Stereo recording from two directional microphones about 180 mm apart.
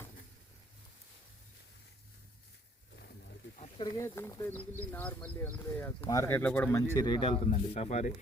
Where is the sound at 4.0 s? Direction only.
15° left (ahead or behind).